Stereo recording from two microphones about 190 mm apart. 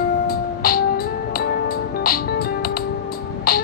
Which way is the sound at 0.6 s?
50° left (ahead or behind).